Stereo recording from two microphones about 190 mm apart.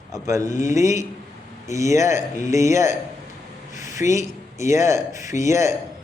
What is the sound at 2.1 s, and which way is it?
Speech, 40° left (ahead or behind).